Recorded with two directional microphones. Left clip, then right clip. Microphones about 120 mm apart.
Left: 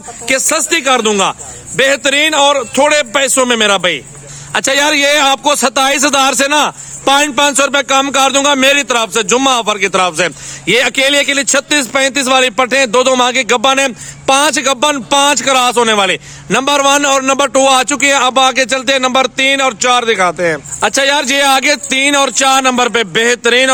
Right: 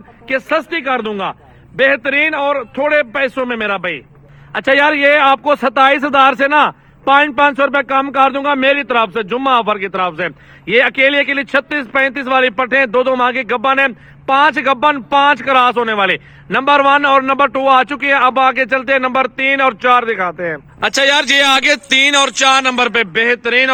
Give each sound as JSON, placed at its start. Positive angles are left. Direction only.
{"t": 0.3, "sound": "a man's voice", "side_deg": 30}
{"t": 6.3, "sound": "speech", "side_deg": 20}
{"t": 22.5, "sound": "a man's voice", "side_deg": 25}